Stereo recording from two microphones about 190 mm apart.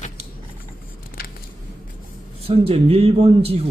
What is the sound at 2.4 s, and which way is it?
Speech, 30° right (ahead or behind).